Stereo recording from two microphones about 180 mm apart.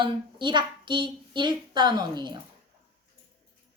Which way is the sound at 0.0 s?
25° right (ahead or behind).